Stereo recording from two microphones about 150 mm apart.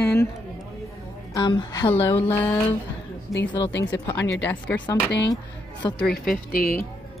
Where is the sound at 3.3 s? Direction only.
Centre (ahead or behind).